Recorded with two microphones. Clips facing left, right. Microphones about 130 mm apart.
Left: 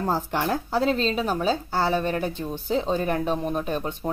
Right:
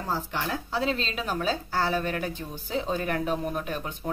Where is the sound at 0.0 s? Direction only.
45° left (ahead or behind).